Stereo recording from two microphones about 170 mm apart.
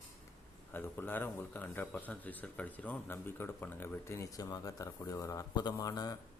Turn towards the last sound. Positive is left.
turn(degrees=20)  # may be behind; listen again after turning